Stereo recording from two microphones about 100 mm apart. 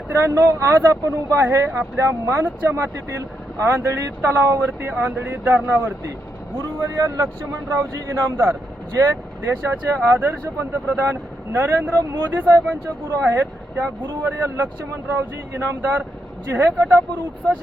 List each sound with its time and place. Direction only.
0.1 s speech: 30° right (ahead or behind)
6.6 s speech: 30° right (ahead or behind)
9.6 s speech: 20° right (ahead or behind)